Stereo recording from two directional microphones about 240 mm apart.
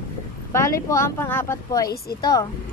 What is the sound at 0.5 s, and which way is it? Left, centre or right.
Speech, centre.